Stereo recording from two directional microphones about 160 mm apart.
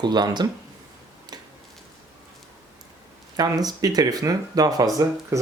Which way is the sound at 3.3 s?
25° right (ahead or behind).